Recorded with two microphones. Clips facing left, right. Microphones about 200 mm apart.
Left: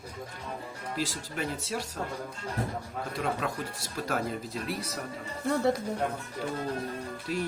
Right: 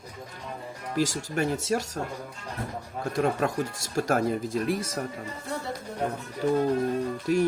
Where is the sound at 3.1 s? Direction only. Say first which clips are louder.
Right 7 dB; 45° right (ahead or behind).